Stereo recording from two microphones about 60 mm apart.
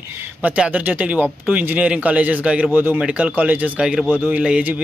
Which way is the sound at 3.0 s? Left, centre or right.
Centre.